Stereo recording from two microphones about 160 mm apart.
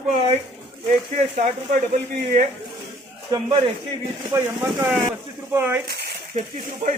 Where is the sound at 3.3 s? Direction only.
30° right (ahead or behind).